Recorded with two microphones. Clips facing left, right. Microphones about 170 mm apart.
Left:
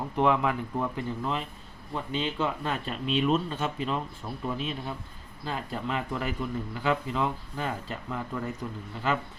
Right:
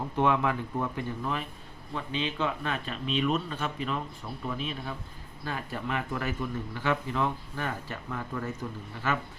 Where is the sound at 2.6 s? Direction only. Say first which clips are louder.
Left 2 dB; 35° left (ahead or behind).